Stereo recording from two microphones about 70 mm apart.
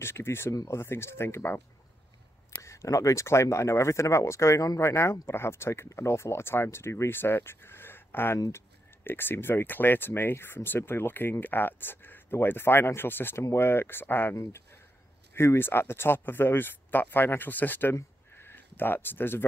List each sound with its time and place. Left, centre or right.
0.0 s speech: left
0.5 s speech: left
0.7 s speech: left
2.6 s speech: left
15.3 s speech: left
18.3 s a sound: left